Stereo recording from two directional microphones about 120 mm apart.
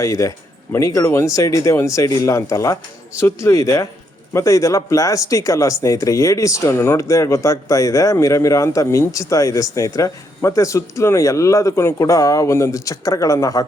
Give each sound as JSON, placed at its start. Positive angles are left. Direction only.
{"t": 0.0, "sound": "speech", "side_deg": 25}